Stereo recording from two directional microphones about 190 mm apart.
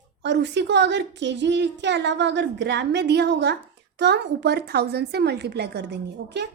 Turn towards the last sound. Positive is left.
turn(degrees=-65)  # may be behind; listen again after turning